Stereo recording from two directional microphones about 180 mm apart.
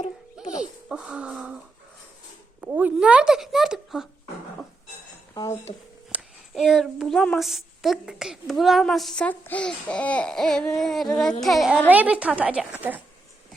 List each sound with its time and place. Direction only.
0.4 s music: 5° right (ahead or behind)
0.9 s a child's voice: 5° right (ahead or behind)
2.6 s a child's voice: 10° right (ahead or behind)
5.3 s speech: 20° left (ahead or behind)
6.1 s a child's voice: 5° right (ahead or behind)